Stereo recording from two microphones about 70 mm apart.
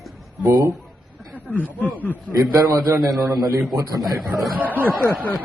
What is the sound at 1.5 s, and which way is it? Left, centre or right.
Speech, left.